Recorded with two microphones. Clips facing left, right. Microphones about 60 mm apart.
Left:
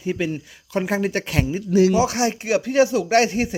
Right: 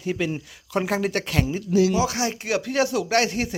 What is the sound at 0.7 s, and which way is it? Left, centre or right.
Speech, centre.